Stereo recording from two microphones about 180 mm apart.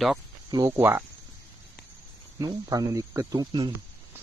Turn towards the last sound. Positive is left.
turn(degrees=-20)  # may be behind; listen again after turning